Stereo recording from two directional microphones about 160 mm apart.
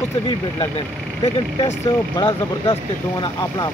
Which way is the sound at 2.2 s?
30° left (ahead or behind).